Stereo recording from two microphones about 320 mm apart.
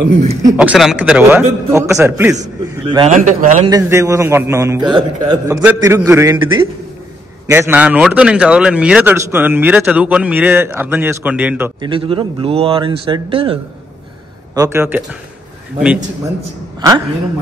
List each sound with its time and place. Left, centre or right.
0.1 s a man's voice: centre
2.4 s a man's voice: centre
3.7 s a man's voice: centre